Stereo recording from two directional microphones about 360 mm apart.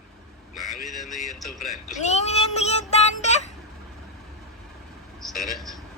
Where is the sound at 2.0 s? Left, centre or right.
Centre.